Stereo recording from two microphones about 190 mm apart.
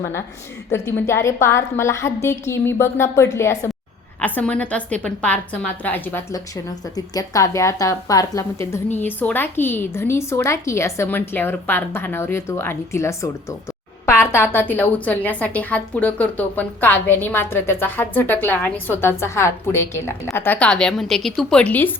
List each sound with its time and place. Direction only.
0.7 s a woman's voice: 15° left (ahead or behind)